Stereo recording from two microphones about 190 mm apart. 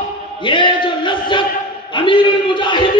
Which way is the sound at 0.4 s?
25° left (ahead or behind).